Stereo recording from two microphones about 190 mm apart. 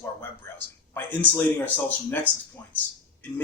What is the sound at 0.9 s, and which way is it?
Speech, 10° left (ahead or behind).